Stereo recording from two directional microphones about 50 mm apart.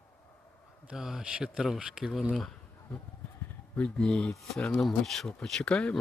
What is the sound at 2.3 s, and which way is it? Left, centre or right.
Speech, centre.